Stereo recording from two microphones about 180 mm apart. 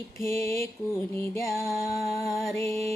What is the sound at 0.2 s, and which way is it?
Mantra, 15° left (ahead or behind).